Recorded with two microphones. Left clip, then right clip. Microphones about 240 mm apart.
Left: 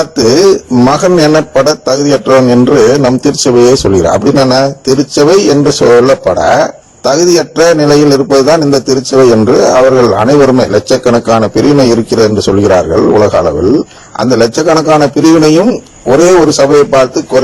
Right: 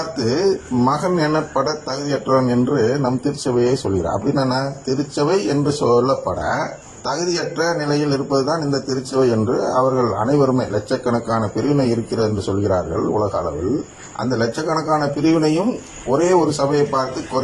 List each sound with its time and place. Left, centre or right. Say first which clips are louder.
0.2 s a man's voice: left 13 dB; left